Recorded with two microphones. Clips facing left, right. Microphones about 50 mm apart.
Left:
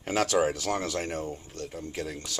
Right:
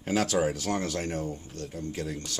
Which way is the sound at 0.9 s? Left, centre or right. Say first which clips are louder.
Even; left.